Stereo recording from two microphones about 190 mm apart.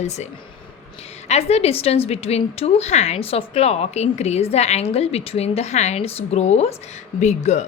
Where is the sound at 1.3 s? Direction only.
35° left (ahead or behind).